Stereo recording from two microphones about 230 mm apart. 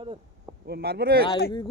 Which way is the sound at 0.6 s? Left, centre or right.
Right.